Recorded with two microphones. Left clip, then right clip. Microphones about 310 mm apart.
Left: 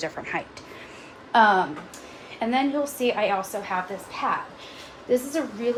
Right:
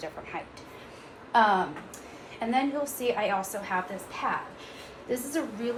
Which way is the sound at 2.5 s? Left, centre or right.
Left.